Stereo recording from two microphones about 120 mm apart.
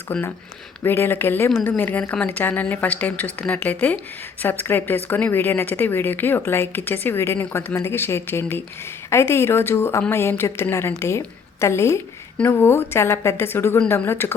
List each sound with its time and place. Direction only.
0.1 s a woman's voice: 15° left (ahead or behind)